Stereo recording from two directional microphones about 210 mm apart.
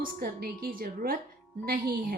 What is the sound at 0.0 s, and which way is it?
A woman's voice, 45° right (ahead or behind).